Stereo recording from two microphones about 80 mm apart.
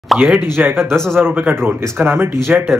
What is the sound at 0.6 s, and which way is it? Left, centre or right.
Speech, right.